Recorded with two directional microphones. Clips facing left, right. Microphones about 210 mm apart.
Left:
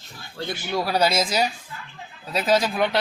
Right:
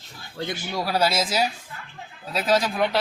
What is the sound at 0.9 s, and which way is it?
A man's voice, 5° right (ahead or behind).